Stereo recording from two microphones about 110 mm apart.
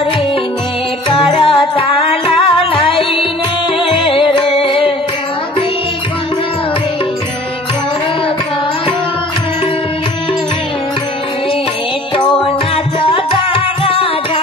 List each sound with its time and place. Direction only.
1.0 s music: 55° left (ahead or behind)
12.2 s music: 50° left (ahead or behind)